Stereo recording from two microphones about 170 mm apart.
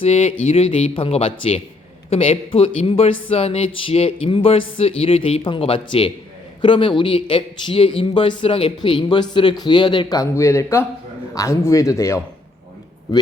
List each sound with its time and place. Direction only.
0.0 s speech: 40° left (ahead or behind); by 12.2 s 15° left (ahead or behind)